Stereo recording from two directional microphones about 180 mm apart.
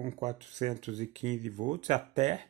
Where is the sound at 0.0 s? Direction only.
40° right (ahead or behind).